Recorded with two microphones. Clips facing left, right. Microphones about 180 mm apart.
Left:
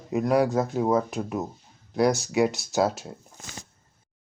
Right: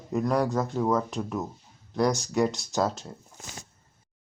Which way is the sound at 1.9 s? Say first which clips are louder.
Left 3 dB; 5° left (ahead or behind).